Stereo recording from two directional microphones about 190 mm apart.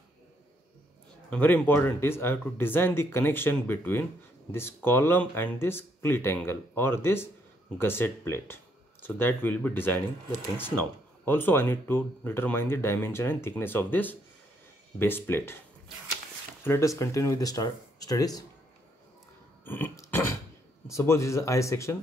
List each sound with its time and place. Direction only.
1.3 s speech: 10° left (ahead or behind)
16.6 s speech: 15° left (ahead or behind)
19.6 s burping: 10° left (ahead or behind)
20.8 s speech: 15° left (ahead or behind)